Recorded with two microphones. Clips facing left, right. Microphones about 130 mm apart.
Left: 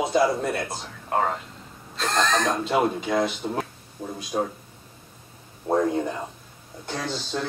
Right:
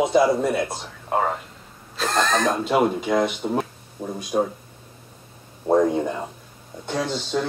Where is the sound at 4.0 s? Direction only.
25° right (ahead or behind).